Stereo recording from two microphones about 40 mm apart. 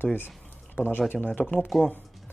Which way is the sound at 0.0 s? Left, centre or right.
Left.